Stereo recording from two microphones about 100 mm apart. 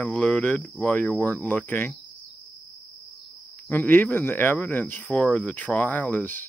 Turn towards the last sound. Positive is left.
turn(degrees=20)  # may be behind; listen again after turning